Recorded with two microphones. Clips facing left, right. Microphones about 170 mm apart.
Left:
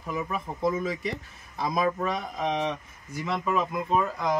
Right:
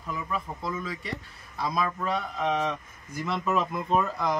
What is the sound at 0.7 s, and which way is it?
Speech, 20° left (ahead or behind).